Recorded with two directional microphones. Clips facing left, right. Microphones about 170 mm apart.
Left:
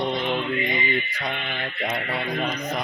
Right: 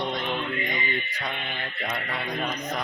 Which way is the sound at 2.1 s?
5° left (ahead or behind).